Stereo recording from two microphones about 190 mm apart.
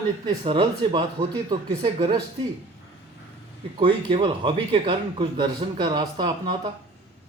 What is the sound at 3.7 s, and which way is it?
Speech, 25° right (ahead or behind).